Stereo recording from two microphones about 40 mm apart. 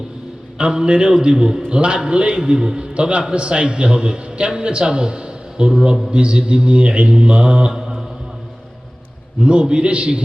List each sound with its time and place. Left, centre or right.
0.6 s a man's voice: right
2.9 s a man's voice: right
7.7 s mantra: centre
9.4 s a man's voice: right